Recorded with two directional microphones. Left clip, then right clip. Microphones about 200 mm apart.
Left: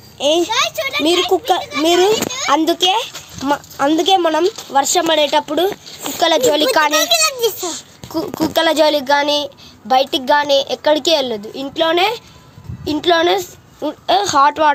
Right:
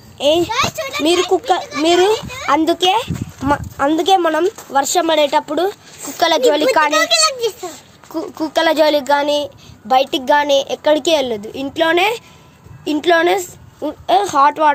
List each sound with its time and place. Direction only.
0.2 s a child's voice: 5° right (ahead or behind)
7.0 s a sound: 45° left (ahead or behind)
7.6 s a child's voice: 5° left (ahead or behind)